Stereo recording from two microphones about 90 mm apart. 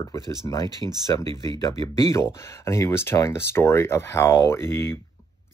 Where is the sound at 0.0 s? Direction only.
35° left (ahead or behind).